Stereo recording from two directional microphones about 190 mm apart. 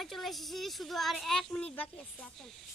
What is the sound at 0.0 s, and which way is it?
A woman's voice, centre (ahead or behind).